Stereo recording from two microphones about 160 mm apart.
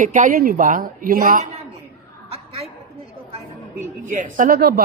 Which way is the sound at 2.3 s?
40° right (ahead or behind).